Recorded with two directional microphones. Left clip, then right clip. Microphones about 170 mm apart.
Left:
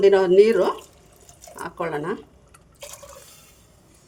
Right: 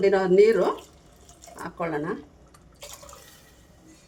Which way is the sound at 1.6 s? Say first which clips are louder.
Left 2 dB; 40° left (ahead or behind).